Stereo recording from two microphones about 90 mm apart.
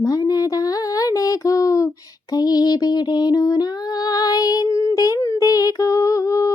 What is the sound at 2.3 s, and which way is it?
Female singing, 45° left (ahead or behind).